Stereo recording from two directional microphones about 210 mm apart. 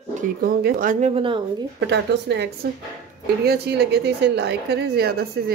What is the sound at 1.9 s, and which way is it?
Speech, 55° right (ahead or behind).